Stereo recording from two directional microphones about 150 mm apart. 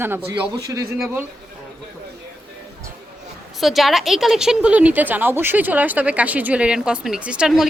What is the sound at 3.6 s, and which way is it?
A woman's voice, centre (ahead or behind).